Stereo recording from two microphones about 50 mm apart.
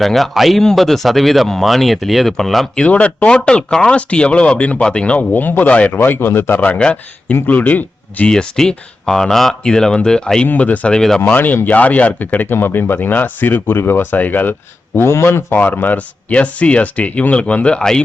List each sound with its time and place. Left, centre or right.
0.0 s speech: centre
2.7 s speech: left
5.3 s speech: left
6.1 s a man's voice: left
8.3 s speech: centre
10.4 s speech: left
10.9 s speech: centre
11.3 s speech: left
12.5 s speech: left
14.9 s a man's voice: left